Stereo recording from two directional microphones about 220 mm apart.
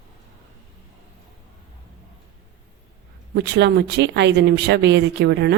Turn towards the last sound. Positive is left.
turn(degrees=-50)  # may be behind; listen again after turning